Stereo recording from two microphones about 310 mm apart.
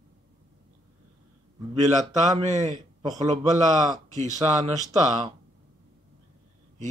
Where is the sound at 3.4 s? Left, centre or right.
Right.